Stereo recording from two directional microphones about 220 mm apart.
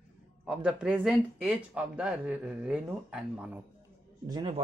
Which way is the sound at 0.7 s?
5° right (ahead or behind).